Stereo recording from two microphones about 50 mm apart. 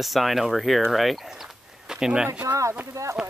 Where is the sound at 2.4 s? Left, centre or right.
Right.